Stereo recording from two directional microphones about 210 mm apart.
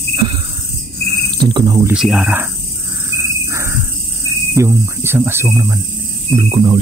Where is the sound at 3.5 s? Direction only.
15° right (ahead or behind).